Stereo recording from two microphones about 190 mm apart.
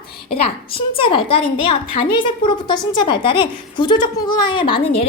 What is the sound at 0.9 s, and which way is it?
A woman's voice, 25° left (ahead or behind).